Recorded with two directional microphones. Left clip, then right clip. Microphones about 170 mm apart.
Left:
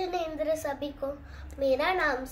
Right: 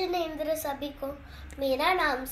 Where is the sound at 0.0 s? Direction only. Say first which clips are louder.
Right 1 dB; centre (ahead or behind).